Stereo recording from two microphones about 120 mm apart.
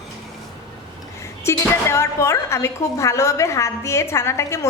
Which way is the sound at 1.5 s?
25° left (ahead or behind).